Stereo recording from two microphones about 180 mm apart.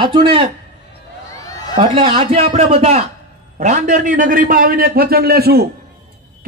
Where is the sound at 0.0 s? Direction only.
30° right (ahead or behind).